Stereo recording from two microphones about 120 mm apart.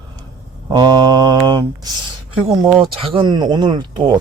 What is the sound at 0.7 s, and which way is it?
Speech, 35° right (ahead or behind).